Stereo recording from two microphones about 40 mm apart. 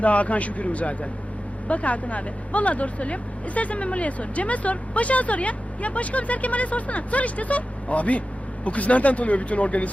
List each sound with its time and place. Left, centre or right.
0.0 s speech: left